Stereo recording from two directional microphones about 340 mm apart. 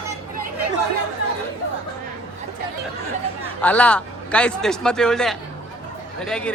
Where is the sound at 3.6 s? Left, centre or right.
Centre.